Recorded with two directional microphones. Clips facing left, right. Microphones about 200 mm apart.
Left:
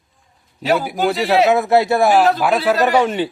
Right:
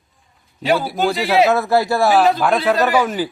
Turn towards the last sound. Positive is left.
turn(degrees=25)  # may be behind; listen again after turning